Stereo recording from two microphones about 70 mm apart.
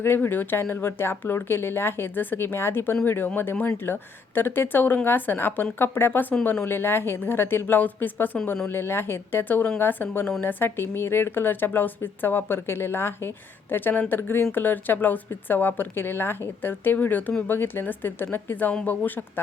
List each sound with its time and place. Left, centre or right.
0.0 s a woman's voice: left